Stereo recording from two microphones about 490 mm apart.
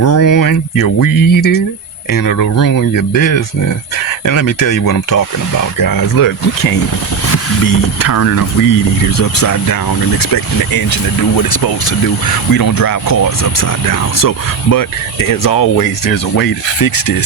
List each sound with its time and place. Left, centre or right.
0.0 s speech: left